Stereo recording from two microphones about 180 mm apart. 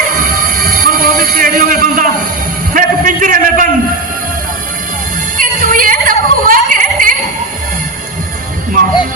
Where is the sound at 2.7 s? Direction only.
50° right (ahead or behind).